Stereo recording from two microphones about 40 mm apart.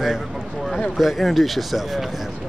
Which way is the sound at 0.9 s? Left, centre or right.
Centre.